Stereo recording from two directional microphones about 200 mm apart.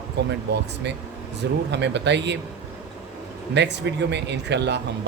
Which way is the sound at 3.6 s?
60° right (ahead or behind).